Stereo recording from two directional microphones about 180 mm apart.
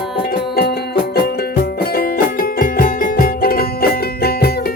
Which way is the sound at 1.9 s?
55° left (ahead or behind).